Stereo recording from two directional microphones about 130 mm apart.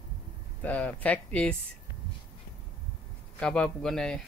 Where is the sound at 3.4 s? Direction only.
5° left (ahead or behind).